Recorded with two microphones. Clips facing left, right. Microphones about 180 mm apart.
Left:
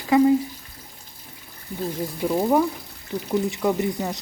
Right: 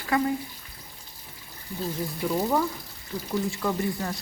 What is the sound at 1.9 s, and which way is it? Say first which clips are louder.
Speech: left 4 dB; 20° left (ahead or behind).